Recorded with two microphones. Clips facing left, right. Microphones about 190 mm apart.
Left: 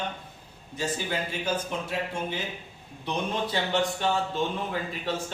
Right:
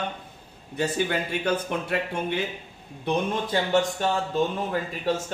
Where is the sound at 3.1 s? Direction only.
45° right (ahead or behind).